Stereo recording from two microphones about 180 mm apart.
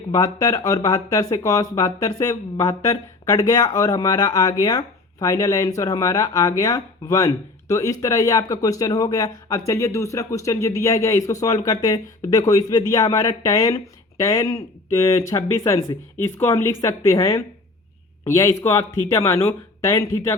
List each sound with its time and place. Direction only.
0.1 s a woman's voice: 20° left (ahead or behind)